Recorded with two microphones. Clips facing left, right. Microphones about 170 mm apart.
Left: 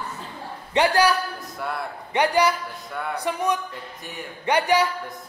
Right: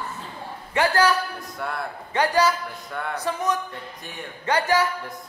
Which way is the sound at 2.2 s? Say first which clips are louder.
Left 1 dB; 15° left (ahead or behind).